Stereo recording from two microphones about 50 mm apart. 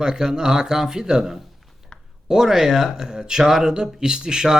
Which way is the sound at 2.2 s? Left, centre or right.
Centre.